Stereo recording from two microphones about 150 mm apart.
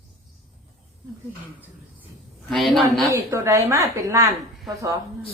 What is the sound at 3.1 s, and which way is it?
A woman's voice, 20° right (ahead or behind).